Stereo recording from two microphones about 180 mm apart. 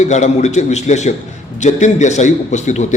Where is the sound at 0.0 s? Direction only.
40° left (ahead or behind).